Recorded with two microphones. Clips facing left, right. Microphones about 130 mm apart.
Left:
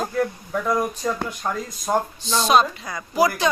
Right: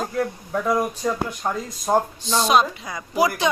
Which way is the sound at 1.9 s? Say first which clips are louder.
Right 2 dB; 20° right (ahead or behind).